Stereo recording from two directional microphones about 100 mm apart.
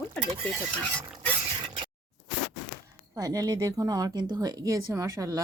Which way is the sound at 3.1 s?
35° right (ahead or behind).